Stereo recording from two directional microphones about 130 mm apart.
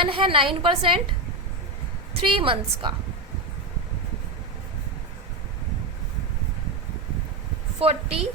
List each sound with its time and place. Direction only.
0.0 s a woman's voice: 45° right (ahead or behind)
2.2 s a woman's voice: 40° right (ahead or behind)
7.8 s a woman's voice: 50° right (ahead or behind)